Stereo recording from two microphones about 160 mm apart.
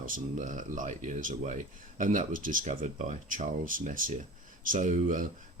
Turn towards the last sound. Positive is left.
turn(degrees=-55)  # may be behind; listen again after turning